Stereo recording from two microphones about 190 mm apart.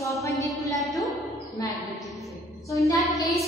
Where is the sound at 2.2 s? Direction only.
Centre (ahead or behind).